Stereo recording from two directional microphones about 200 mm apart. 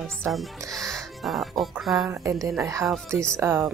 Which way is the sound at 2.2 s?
15° right (ahead or behind).